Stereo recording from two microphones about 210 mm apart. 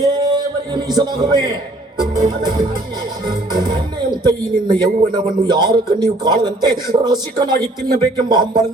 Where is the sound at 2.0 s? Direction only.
20° right (ahead or behind).